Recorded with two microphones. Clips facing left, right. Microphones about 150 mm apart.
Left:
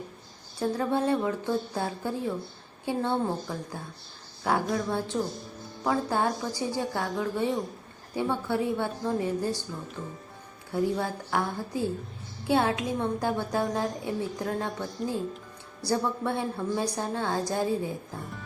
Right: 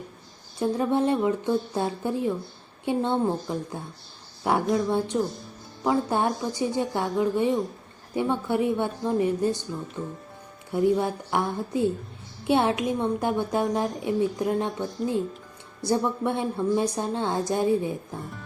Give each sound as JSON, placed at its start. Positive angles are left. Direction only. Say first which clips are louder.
{"t": 0.6, "sound": "a woman's voice", "louder": "right 3 dB", "side_deg": -20}
{"t": 10.0, "sound": "speech", "louder": "right 6 dB", "side_deg": 0}
{"t": 10.7, "sound": "a woman's voice", "louder": "right 5 dB", "side_deg": -20}
{"t": 12.5, "sound": "a woman's voice", "louder": "right 3 dB", "side_deg": -20}
{"t": 18.2, "sound": "speech", "louder": "right 2 dB", "side_deg": 0}